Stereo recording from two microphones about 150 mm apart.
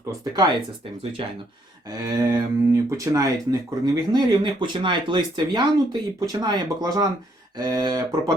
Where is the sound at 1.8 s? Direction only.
25° right (ahead or behind).